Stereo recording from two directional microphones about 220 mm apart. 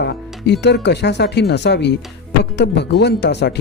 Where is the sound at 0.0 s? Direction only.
50° left (ahead or behind).